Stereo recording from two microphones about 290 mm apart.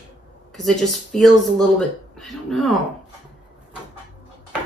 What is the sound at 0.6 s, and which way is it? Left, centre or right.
Speech, centre.